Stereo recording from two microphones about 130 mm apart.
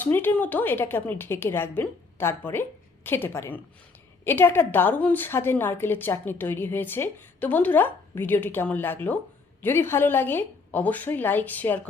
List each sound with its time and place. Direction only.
0.0 s a woman's voice: 15° left (ahead or behind)